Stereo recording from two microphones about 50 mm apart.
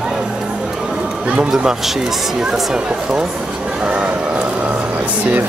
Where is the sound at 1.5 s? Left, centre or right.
Centre.